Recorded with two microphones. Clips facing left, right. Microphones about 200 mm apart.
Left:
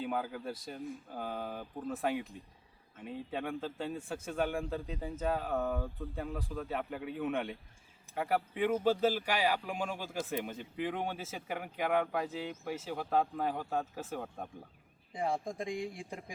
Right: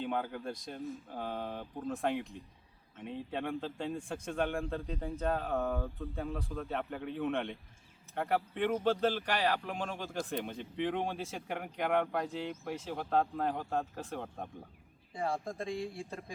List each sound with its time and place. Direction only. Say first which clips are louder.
0.0 s speech: even; 5° left (ahead or behind)
15.1 s speech: left 1 dB; 15° left (ahead or behind)